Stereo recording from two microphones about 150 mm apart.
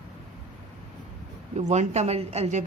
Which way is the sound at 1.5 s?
50° right (ahead or behind).